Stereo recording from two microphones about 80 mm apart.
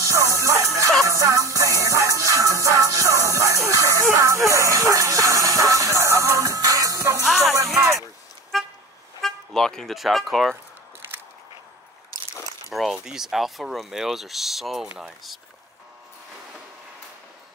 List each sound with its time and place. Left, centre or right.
0.0 s music: right
7.2 s music: centre
7.5 s music: right
8.5 s toot: centre
12.7 s speech: centre